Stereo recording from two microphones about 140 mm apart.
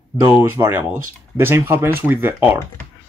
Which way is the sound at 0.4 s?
15° right (ahead or behind).